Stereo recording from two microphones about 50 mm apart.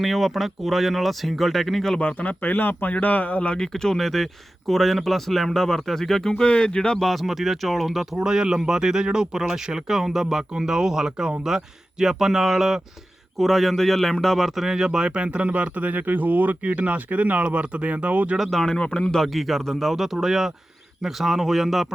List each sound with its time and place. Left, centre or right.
0.0 s speech: centre
2.0 s a man's voice: left
3.5 s speech: centre
6.3 s speech: centre
7.0 s a man's voice: centre; by 18.3 s right
18.4 s speech: centre